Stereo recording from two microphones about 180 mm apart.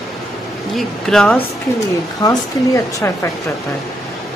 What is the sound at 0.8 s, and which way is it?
Speech, centre (ahead or behind).